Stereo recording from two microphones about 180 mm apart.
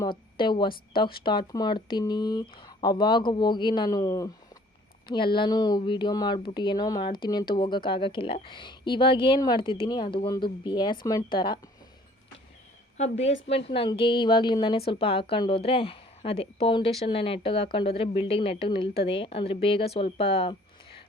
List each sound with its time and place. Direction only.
0.0 s a woman's voice: 25° left (ahead or behind)
13.0 s a woman's voice: 35° left (ahead or behind)